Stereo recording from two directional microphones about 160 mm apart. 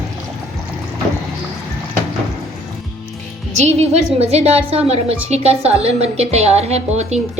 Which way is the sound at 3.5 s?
40° right (ahead or behind).